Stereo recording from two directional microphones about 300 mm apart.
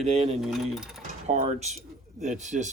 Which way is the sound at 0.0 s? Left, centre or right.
Right.